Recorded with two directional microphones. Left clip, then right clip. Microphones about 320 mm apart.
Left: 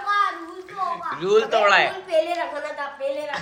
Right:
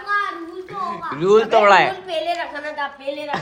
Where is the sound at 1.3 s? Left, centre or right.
Centre.